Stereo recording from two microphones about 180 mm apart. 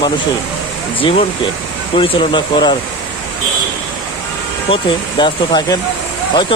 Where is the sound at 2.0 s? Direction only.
25° left (ahead or behind).